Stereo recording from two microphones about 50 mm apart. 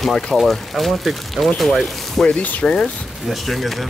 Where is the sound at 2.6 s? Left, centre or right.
Centre.